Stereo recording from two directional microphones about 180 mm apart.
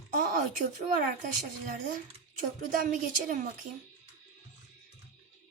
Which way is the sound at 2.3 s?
50° right (ahead or behind).